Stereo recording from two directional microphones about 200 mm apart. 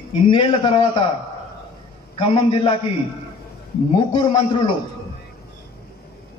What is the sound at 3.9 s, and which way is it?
Speech, 25° left (ahead or behind).